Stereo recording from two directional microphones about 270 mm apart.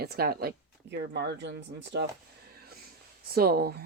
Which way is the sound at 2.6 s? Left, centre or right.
Right.